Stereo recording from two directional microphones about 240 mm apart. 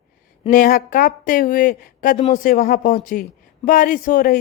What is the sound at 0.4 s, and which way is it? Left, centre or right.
Speech, left.